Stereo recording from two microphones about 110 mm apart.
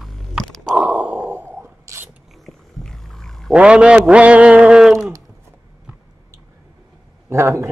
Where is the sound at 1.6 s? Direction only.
25° right (ahead or behind).